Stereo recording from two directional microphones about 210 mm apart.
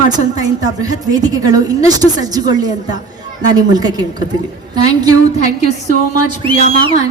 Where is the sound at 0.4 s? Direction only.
15° right (ahead or behind).